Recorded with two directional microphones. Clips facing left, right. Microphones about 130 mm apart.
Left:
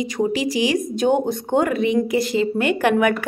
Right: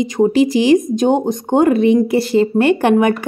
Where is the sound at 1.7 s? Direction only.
30° right (ahead or behind).